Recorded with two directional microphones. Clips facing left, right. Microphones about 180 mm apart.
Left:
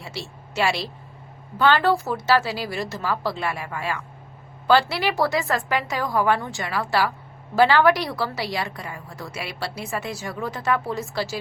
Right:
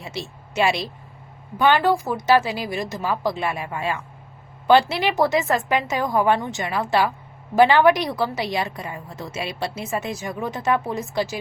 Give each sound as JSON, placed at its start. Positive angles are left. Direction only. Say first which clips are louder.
{"t": 0.0, "sound": "a woman's voice", "louder": "right 3 dB", "side_deg": -20}